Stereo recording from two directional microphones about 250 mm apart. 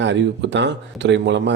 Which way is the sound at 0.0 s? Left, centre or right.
Right.